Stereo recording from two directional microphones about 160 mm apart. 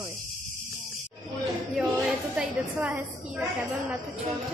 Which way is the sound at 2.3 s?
5° right (ahead or behind).